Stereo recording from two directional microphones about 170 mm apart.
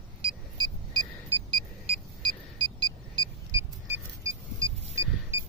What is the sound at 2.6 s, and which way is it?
Vehicle, 25° right (ahead or behind).